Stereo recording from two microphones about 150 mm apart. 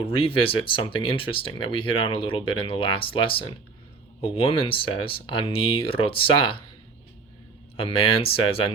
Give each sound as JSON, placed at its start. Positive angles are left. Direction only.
{"t": 0.0, "sound": "speech", "side_deg": 35}
{"t": 7.8, "sound": "speech", "side_deg": 35}